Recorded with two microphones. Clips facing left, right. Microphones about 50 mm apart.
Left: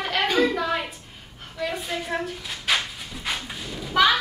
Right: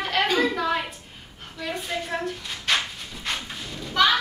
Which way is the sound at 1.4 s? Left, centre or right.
Centre.